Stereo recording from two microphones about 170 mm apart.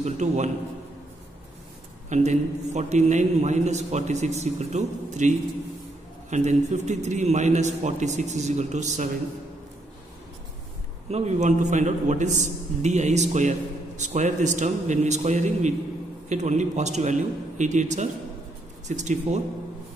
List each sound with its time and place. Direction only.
0.0 s a man's voice: 45° right (ahead or behind)
2.0 s a man's voice: 45° right (ahead or behind)
6.3 s a man's voice: 45° right (ahead or behind)
11.1 s a man's voice: 40° right (ahead or behind)